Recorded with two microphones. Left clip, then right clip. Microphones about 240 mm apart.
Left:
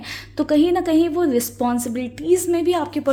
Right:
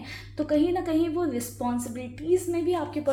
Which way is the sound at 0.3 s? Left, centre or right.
Left.